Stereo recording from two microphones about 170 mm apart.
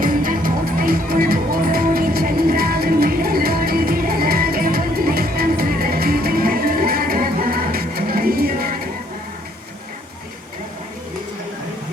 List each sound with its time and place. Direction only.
0.0 s music: 55° right (ahead or behind)